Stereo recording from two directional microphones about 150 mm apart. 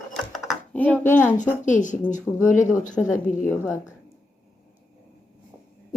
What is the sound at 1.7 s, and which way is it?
Speech, 55° left (ahead or behind).